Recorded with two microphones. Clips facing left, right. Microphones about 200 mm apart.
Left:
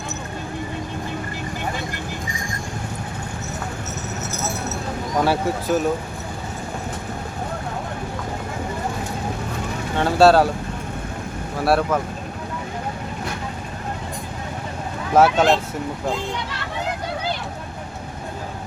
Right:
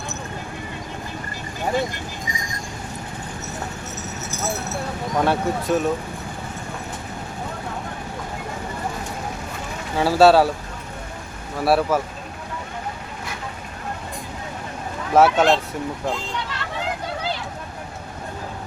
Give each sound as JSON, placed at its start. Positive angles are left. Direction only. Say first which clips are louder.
{"t": 5.2, "sound": "speech", "louder": "even", "side_deg": 5}
{"t": 10.0, "sound": "speech", "louder": "even", "side_deg": -5}
{"t": 11.6, "sound": "speech", "louder": "even", "side_deg": -5}
{"t": 15.1, "sound": "speech", "louder": "even", "side_deg": 0}